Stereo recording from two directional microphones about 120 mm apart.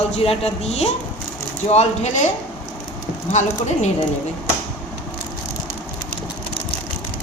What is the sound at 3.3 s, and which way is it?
Speech, 85° left.